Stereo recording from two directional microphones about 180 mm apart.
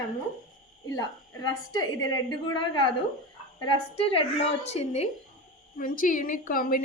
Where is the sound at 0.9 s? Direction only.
20° left (ahead or behind).